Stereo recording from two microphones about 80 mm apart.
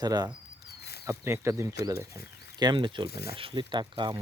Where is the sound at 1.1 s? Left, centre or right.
Right.